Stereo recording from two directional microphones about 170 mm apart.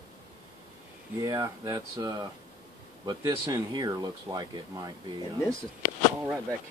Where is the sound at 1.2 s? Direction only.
20° right (ahead or behind).